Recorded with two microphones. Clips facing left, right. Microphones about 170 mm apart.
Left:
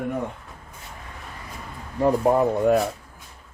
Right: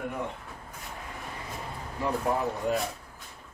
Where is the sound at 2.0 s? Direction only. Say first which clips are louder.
Left 9 dB; 50° left (ahead or behind).